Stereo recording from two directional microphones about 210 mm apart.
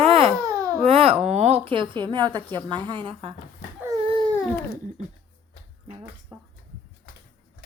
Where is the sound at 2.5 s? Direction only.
20° right (ahead or behind).